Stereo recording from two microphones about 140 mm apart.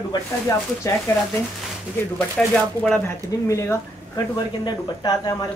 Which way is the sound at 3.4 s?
20° left (ahead or behind).